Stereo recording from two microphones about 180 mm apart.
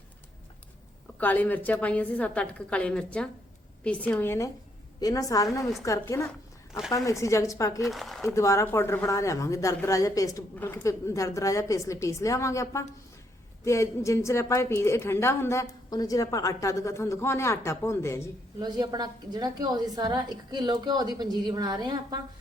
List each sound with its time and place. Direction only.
1.2 s a woman's voice: 10° left (ahead or behind)
7.8 s speech: centre (ahead or behind)
8.3 s speech: 15° left (ahead or behind)
18.6 s a woman's voice: 25° right (ahead or behind)